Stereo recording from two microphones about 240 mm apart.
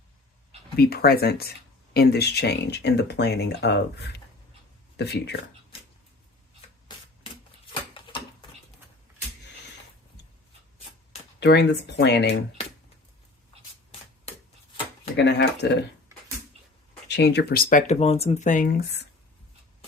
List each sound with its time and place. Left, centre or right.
0.8 s speech: left
7.7 s a sound: centre
11.3 s speech: left
15.1 s speech: left
17.1 s speech: left